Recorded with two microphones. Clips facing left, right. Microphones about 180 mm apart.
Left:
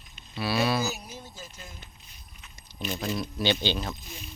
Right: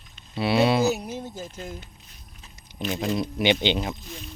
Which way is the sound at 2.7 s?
15° right (ahead or behind).